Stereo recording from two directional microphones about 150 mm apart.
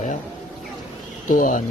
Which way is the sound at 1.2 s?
65° left (ahead or behind).